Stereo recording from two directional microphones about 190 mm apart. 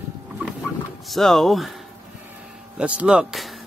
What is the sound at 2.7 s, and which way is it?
Speech, 5° right (ahead or behind).